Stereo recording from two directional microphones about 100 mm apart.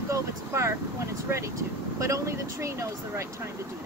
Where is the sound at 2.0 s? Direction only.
30° right (ahead or behind).